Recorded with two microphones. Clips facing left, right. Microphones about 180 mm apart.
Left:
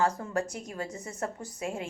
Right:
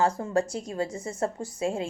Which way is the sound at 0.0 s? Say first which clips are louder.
Right 4 dB; 30° right (ahead or behind).